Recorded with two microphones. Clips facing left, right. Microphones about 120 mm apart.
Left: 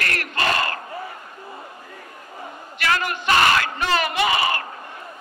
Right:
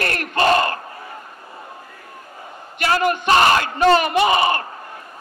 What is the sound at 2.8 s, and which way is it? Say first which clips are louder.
Speech: right 5 dB; 35° right (ahead or behind).